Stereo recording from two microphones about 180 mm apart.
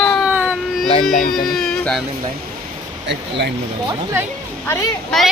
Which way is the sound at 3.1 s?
75° right (ahead or behind).